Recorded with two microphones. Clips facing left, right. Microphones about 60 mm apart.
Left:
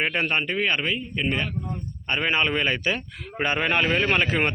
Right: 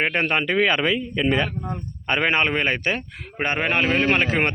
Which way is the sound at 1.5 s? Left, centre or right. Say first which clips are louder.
Right 2 dB; right.